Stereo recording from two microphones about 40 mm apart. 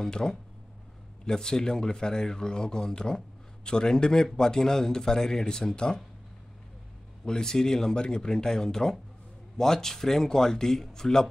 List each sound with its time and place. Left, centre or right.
0.0 s a man's voice: centre
7.2 s a man's voice: centre